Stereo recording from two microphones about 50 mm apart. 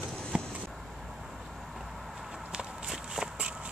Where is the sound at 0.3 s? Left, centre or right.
Centre.